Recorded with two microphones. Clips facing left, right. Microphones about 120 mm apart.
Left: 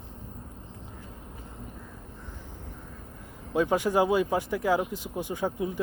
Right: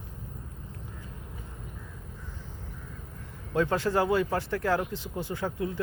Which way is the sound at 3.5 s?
15° left (ahead or behind).